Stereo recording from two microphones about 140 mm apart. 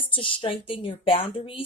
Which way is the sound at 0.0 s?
40° left (ahead or behind).